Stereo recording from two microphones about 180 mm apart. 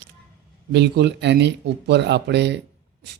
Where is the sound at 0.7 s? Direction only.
70° right (ahead or behind).